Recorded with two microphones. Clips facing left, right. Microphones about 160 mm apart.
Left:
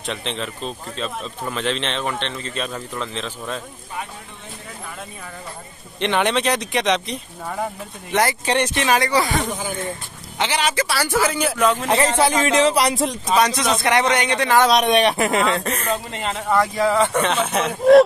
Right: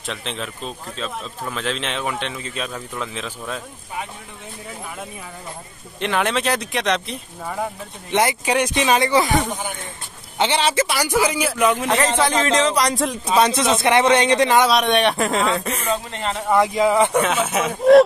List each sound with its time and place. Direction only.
0.0 s speech: centre (ahead or behind)
5.9 s speech: centre (ahead or behind)
8.1 s speech: 20° right (ahead or behind)
10.4 s speech: 30° right (ahead or behind); by 11.8 s 10° right (ahead or behind)
12.3 s speech: 10° left (ahead or behind)
12.9 s speech: centre (ahead or behind)
13.4 s speech: 25° right (ahead or behind)
14.7 s speech: centre (ahead or behind)
15.9 s speech: 5° left (ahead or behind)
16.4 s speech: 20° right (ahead or behind)
17.2 s speech: 5° right (ahead or behind)